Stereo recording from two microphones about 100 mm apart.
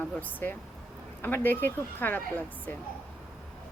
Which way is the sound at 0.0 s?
20° left (ahead or behind).